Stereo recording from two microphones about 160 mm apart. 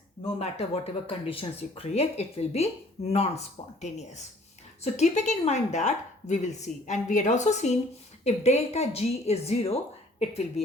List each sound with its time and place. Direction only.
0.3 s a woman's voice: 40° left (ahead or behind)